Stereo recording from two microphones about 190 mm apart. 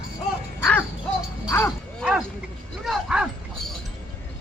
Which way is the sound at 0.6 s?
10° left (ahead or behind).